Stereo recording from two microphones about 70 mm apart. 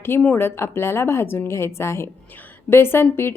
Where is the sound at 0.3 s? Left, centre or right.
Left.